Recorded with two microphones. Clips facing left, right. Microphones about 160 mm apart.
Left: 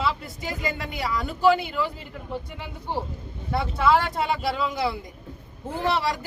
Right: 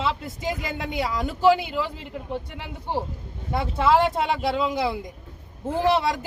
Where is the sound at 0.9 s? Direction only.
20° right (ahead or behind).